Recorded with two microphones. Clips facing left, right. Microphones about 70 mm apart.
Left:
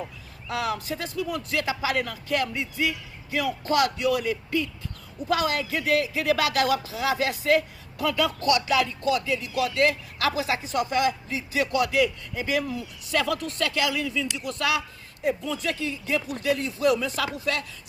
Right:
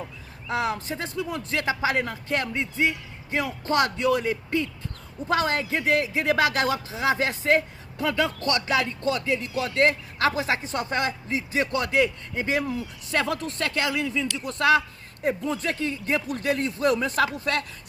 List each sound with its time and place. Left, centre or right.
0.4 s speech: right